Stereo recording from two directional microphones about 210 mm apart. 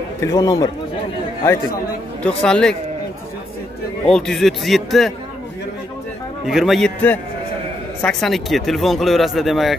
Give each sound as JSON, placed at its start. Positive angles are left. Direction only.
{"t": 0.2, "sound": "a man's voice", "side_deg": 15}
{"t": 2.2, "sound": "speech", "side_deg": 5}
{"t": 4.1, "sound": "speech", "side_deg": 0}
{"t": 6.4, "sound": "speech", "side_deg": 0}